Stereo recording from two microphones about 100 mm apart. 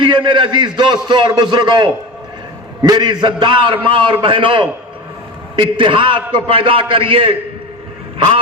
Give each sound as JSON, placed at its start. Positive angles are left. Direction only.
{"t": 0.0, "sound": "a man's voice", "side_deg": -55}